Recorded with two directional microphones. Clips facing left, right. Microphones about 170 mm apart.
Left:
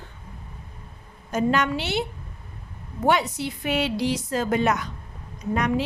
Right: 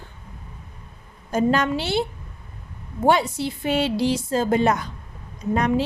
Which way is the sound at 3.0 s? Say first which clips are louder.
Right 3 dB; 30° right (ahead or behind).